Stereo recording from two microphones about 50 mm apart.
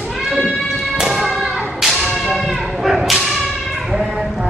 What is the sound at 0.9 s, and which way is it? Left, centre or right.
Thump, centre.